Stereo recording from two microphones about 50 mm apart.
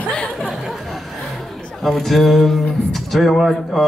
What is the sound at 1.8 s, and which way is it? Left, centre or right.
A man's voice, centre.